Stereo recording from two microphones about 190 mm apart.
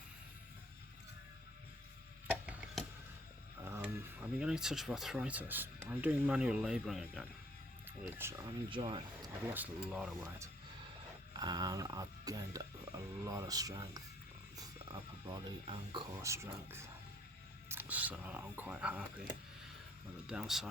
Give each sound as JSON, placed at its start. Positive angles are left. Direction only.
{"t": 2.5, "sound": "a sound", "side_deg": -5}
{"t": 3.7, "sound": "speech", "side_deg": -10}
{"t": 8.0, "sound": "speech", "side_deg": -10}
{"t": 8.7, "sound": "speech", "side_deg": -25}
{"t": 9.4, "sound": "speech", "side_deg": -10}
{"t": 11.3, "sound": "speech", "side_deg": -20}
{"t": 16.2, "sound": "speech", "side_deg": -15}